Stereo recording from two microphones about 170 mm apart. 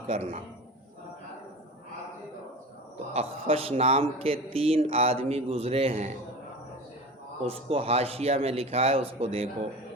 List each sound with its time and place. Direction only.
0.1 s speech: 40° right (ahead or behind)
3.1 s speech: 35° right (ahead or behind)
7.4 s speech: 35° right (ahead or behind)